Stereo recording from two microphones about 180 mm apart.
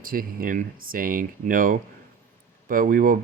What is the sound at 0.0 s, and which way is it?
Speech, 55° right (ahead or behind).